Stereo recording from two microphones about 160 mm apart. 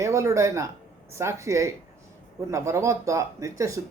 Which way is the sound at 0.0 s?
20° right (ahead or behind).